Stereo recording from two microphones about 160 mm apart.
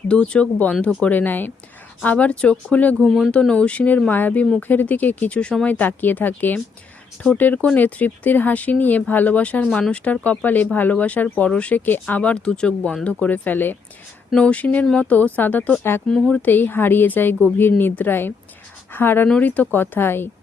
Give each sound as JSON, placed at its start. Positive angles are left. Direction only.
{"t": 0.1, "sound": "speech", "side_deg": 5}